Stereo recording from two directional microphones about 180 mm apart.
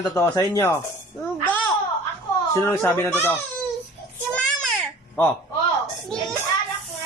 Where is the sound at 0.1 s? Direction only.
15° left (ahead or behind).